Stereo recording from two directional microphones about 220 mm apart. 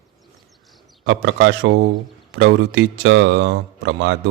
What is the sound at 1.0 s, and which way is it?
Speech, 55° right (ahead or behind).